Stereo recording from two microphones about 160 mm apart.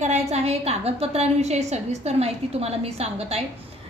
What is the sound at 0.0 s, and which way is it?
A woman's voice, 45° right (ahead or behind).